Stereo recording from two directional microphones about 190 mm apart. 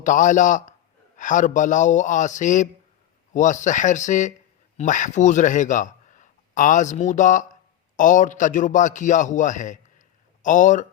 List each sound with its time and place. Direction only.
0.0 s a man's voice: 40° left (ahead or behind)